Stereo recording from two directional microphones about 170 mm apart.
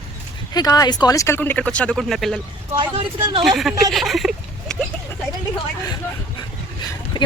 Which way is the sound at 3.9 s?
Centre (ahead or behind).